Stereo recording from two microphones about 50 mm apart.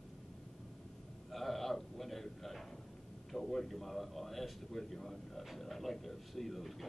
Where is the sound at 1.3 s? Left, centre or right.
Centre.